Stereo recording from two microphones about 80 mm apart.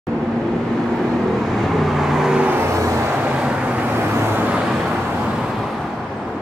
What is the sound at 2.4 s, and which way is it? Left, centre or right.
Vehicle, right.